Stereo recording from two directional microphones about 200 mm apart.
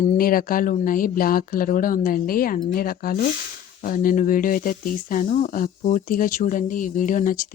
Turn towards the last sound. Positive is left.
turn(degrees=40)  # may be behind; listen again after turning